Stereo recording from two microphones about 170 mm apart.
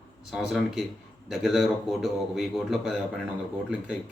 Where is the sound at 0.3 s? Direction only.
Centre (ahead or behind).